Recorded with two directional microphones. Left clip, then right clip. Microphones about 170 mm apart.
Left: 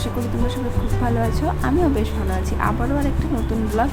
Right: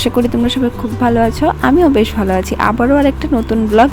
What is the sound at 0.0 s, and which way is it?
Speech, 50° right (ahead or behind).